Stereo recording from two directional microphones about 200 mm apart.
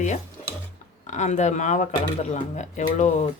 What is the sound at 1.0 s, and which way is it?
Speech, 35° left (ahead or behind).